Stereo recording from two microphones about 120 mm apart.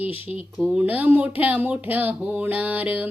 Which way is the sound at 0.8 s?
15° right (ahead or behind).